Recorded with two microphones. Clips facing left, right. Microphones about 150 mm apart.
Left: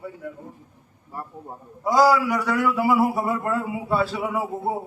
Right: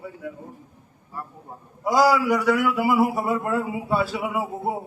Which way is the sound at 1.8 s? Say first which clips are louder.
Left 1 dB; 5° right (ahead or behind).